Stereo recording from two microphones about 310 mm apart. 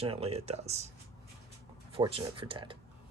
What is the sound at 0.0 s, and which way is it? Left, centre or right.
Speech, centre.